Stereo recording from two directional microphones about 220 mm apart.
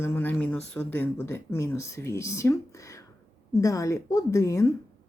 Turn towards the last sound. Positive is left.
turn(degrees=15)  # may be behind; listen again after turning